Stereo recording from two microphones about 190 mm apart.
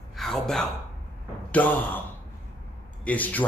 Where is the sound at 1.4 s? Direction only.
10° left (ahead or behind).